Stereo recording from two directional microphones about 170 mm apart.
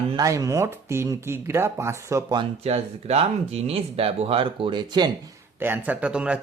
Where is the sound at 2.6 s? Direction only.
35° right (ahead or behind).